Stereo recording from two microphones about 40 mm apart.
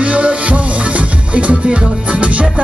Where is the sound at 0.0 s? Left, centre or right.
Right.